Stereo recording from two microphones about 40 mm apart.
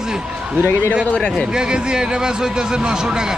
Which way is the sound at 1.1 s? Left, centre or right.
Left.